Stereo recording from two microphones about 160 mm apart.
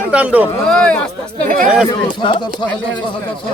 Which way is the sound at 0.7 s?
5° left (ahead or behind).